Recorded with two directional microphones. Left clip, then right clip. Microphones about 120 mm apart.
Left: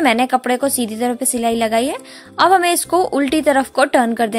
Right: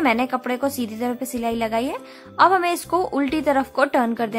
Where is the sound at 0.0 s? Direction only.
35° left (ahead or behind).